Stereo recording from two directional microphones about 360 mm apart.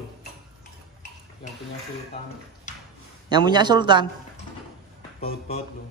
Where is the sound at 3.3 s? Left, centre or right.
Centre.